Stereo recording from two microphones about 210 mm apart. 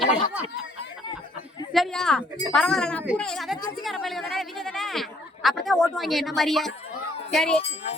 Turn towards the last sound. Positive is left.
turn(degrees=30)  # may be behind; listen again after turning